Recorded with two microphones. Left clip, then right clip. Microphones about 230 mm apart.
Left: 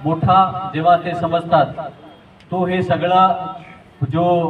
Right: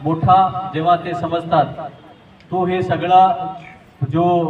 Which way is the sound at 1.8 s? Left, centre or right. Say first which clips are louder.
Left 1 dB; left.